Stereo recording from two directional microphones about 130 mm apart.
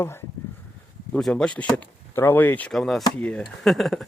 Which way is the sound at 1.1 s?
5° left (ahead or behind).